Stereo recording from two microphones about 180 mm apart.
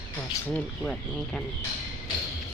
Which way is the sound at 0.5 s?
5° left (ahead or behind).